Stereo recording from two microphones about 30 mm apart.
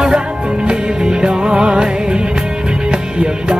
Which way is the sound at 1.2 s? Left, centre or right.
Right.